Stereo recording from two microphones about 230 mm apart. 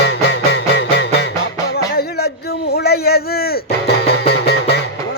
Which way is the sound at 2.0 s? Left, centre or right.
Left.